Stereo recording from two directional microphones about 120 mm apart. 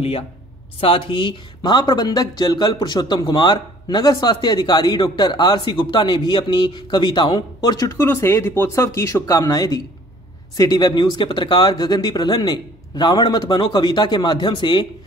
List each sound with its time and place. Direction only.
0.7 s speech: 50° left (ahead or behind); by 7.9 s 35° left (ahead or behind)
8.0 s speech: 20° left (ahead or behind); by 14.9 s 40° left (ahead or behind)